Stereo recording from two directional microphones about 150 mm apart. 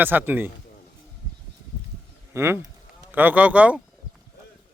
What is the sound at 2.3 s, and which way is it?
Speech, 15° right (ahead or behind).